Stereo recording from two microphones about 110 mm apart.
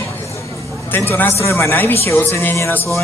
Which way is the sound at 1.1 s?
20° left (ahead or behind).